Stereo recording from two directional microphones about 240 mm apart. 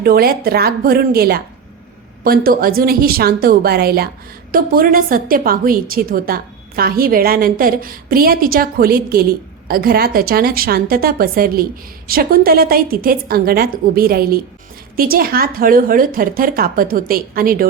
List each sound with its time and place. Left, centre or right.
0.0 s a woman's voice: right